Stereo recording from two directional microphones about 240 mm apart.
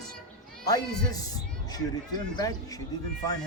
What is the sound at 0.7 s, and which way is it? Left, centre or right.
Speech, centre.